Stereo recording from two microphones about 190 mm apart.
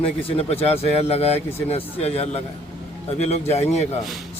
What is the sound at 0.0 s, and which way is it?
Speech, 30° left (ahead or behind).